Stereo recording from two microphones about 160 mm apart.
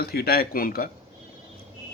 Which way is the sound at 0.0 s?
75° left (ahead or behind).